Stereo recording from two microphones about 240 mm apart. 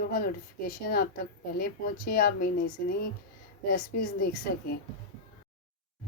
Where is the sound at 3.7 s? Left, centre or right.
Left.